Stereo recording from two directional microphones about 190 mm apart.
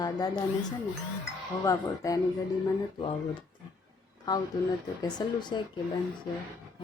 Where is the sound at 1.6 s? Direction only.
15° left (ahead or behind).